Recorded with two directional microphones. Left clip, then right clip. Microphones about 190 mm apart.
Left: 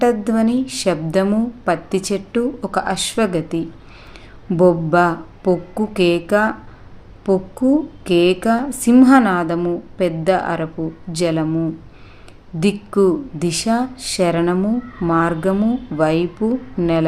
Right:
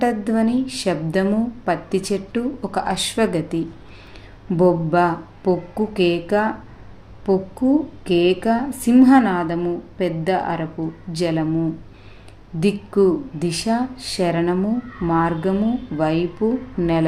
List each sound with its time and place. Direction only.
0.0 s speech: 20° left (ahead or behind)